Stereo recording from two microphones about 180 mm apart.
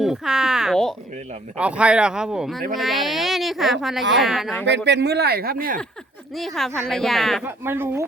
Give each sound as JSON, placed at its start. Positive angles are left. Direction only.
{"t": 0.0, "sound": "speech", "side_deg": -5}
{"t": 4.9, "sound": "speech", "side_deg": -65}
{"t": 6.3, "sound": "speech", "side_deg": 0}
{"t": 7.4, "sound": "speech", "side_deg": -15}